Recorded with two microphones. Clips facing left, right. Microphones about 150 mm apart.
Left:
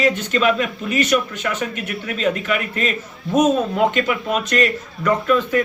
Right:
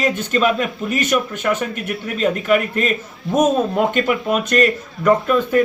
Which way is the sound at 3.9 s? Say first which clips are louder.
Right 2 dB; 50° right (ahead or behind).